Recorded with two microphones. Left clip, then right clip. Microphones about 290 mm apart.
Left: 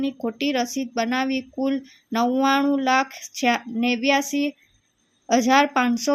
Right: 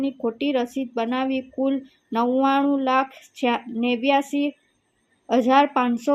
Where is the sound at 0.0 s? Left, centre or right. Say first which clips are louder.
Right 1 dB; left.